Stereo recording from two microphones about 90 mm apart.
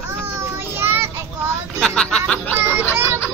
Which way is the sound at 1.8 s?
10° left (ahead or behind).